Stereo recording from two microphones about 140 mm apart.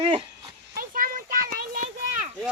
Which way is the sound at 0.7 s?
85° right.